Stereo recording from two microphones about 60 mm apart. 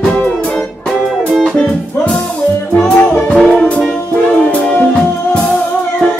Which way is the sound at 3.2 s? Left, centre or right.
Centre.